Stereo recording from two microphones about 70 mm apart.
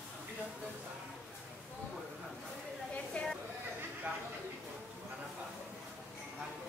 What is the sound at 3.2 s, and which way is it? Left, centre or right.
Chatter, centre.